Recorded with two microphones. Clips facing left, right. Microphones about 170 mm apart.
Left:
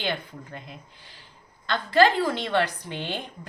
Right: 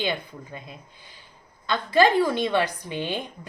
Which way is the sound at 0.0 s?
10° right (ahead or behind).